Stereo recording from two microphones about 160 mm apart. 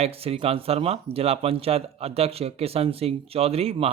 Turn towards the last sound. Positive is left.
turn(degrees=-40)  # may be behind; listen again after turning